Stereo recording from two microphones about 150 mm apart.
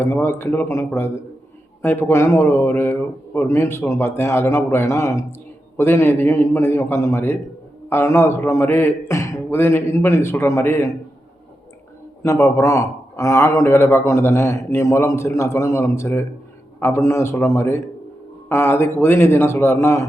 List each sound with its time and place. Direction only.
0.0 s a man's voice: 15° left (ahead or behind)
12.2 s a man's voice: 20° left (ahead or behind)